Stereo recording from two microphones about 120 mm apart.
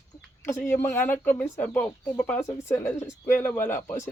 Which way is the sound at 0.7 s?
20° left (ahead or behind).